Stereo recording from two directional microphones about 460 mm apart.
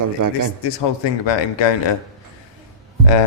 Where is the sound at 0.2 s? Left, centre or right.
Right.